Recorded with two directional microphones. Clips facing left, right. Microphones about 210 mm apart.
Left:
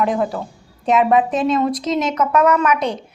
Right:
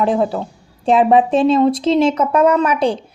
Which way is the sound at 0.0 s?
30° right (ahead or behind).